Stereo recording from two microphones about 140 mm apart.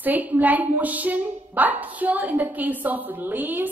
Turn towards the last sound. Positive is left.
turn(degrees=-15)  # may be behind; listen again after turning